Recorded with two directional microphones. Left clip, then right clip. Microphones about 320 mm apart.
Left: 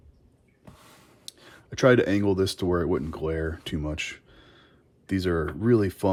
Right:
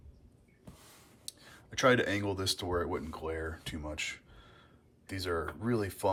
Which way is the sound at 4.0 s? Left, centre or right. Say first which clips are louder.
Left 5 dB; left.